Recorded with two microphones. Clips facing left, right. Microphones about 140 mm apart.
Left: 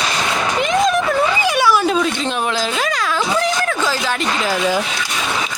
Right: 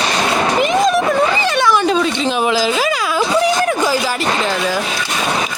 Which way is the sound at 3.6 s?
15° right (ahead or behind).